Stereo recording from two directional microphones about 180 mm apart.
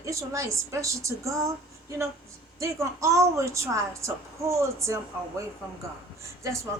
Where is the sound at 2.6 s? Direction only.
15° right (ahead or behind).